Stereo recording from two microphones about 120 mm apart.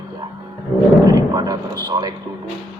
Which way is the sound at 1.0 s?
35° right (ahead or behind).